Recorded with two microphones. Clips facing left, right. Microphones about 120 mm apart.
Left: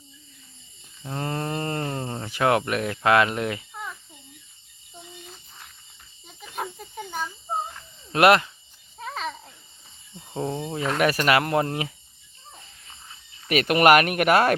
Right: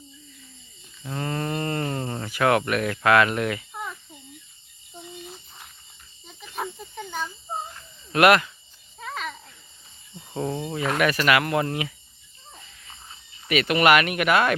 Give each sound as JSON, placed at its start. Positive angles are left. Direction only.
{"t": 1.0, "sound": "a sound", "side_deg": 25}
{"t": 1.9, "sound": "speech", "side_deg": 20}
{"t": 5.2, "sound": "a sound", "side_deg": -10}
{"t": 6.2, "sound": "snake", "side_deg": 5}
{"t": 8.1, "sound": "speech", "side_deg": 30}
{"t": 10.3, "sound": "speech", "side_deg": 20}
{"t": 10.8, "sound": "speech", "side_deg": -10}
{"t": 11.3, "sound": "speech", "side_deg": 35}
{"t": 13.5, "sound": "speech", "side_deg": 45}